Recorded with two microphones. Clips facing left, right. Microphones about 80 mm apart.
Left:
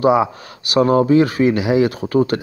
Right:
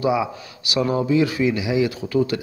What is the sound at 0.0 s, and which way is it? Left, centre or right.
Speech, left.